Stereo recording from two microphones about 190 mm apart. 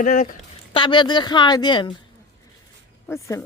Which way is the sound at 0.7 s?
25° left (ahead or behind).